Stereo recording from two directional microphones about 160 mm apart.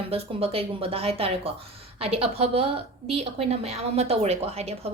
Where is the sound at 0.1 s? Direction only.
35° right (ahead or behind).